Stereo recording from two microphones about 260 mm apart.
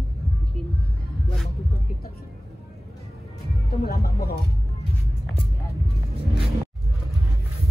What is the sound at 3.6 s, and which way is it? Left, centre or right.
Speech, left.